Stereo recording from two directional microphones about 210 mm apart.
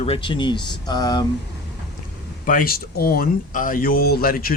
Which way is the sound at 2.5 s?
45° left (ahead or behind).